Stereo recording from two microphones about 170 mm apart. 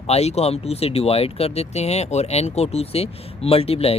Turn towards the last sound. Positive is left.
turn(degrees=35)  # may be behind; listen again after turning